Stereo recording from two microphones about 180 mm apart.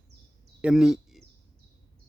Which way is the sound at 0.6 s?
5° right (ahead or behind).